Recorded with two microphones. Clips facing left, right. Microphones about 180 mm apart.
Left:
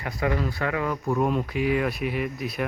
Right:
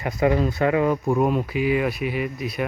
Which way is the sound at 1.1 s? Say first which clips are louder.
Right 3 dB; 5° right (ahead or behind).